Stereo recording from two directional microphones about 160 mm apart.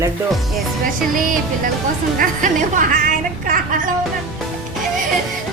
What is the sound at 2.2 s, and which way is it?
Speech, 55° right (ahead or behind).